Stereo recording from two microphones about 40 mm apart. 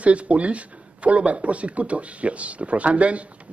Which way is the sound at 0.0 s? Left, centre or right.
Right.